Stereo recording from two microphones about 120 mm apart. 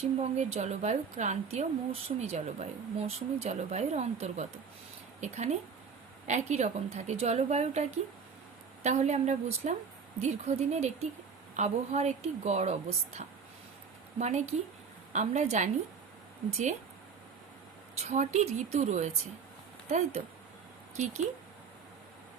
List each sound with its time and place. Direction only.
0.0 s a woman's voice: 65° right (ahead or behind)
13.2 s speech: 90° right
14.2 s a woman's voice: 70° right (ahead or behind)
17.9 s a woman's voice: 70° right (ahead or behind)
20.2 s speech: 90° right
20.9 s speech: 70° right (ahead or behind)